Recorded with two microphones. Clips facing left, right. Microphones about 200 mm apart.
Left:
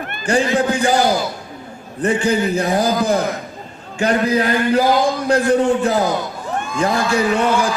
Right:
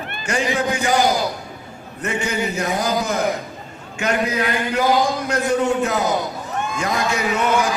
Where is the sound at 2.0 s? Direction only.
30° left (ahead or behind).